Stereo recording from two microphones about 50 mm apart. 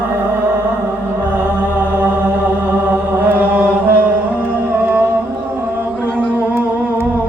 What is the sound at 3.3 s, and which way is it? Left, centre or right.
Chant, right.